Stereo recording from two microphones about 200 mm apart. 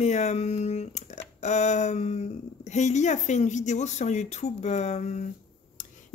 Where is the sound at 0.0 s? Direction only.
35° left (ahead or behind).